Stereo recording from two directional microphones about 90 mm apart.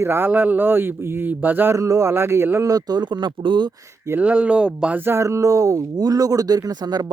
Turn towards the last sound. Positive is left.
turn(degrees=-50)  # may be behind; listen again after turning